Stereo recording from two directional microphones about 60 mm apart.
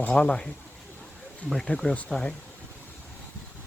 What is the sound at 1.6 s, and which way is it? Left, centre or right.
Speech, centre.